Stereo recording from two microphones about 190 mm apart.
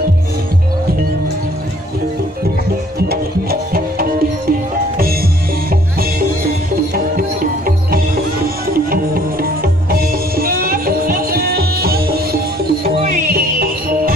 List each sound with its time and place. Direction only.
3.0 s music: 55° right (ahead or behind)
6.7 s music: 50° right (ahead or behind)